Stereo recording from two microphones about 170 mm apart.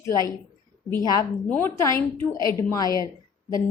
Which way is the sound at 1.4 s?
10° left (ahead or behind).